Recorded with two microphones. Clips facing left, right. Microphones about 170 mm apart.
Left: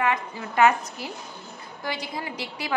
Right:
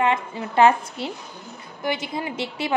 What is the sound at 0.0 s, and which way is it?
A woman's voice, 25° right (ahead or behind).